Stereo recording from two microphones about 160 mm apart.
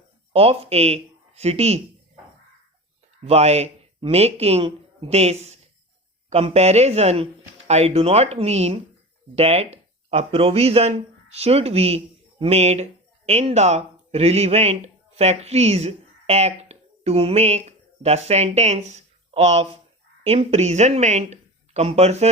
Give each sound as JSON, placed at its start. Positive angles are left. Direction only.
{"t": 0.3, "sound": "speech", "side_deg": -40}
{"t": 3.2, "sound": "speech", "side_deg": -40}